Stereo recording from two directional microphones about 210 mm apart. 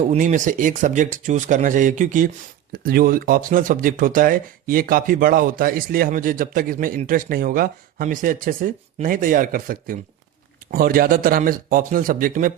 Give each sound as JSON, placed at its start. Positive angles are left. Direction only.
{"t": 0.0, "sound": "speech", "side_deg": -35}